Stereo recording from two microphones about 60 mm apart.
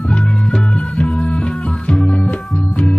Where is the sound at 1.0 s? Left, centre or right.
Centre.